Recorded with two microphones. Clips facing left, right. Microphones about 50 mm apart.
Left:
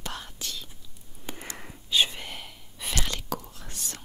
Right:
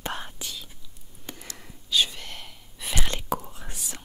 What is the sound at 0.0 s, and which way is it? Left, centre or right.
Whispering, right.